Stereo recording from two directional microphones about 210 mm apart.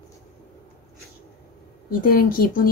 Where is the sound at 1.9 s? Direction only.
45° left (ahead or behind).